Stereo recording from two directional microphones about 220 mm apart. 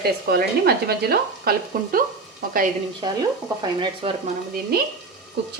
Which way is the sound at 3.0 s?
20° right (ahead or behind).